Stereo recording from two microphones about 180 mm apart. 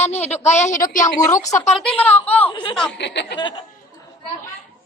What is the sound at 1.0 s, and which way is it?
A woman's voice, 15° left (ahead or behind).